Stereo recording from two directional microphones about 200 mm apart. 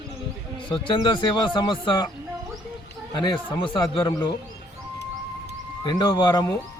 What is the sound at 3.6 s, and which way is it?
Speech, 15° left (ahead or behind).